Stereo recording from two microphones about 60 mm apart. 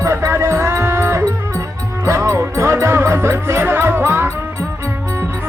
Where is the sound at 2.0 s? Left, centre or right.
Right.